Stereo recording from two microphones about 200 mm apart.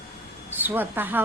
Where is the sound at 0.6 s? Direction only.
10° right (ahead or behind).